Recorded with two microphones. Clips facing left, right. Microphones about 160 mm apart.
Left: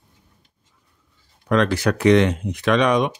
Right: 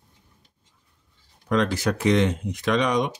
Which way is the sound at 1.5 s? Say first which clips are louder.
Left 4 dB; 70° left (ahead or behind).